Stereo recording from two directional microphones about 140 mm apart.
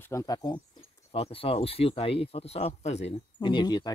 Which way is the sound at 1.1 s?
40° left (ahead or behind).